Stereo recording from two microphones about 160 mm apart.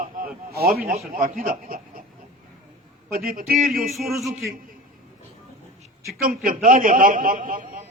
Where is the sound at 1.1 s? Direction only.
60° right (ahead or behind).